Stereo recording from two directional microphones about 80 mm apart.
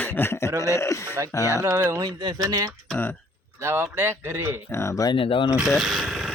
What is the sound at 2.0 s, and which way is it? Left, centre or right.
Speech, right.